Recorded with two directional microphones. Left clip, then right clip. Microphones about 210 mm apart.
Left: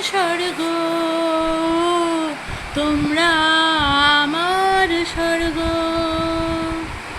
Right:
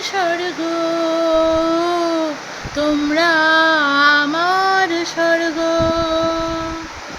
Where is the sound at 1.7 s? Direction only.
25° right (ahead or behind).